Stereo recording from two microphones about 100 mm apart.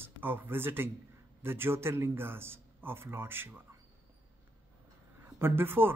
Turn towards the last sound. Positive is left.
turn(degrees=-20)  # may be behind; listen again after turning